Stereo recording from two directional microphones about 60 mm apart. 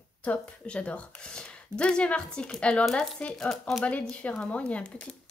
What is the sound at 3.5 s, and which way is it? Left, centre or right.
Speech, centre.